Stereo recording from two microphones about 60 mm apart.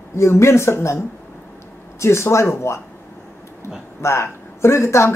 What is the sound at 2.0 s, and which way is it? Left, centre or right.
Speech, left.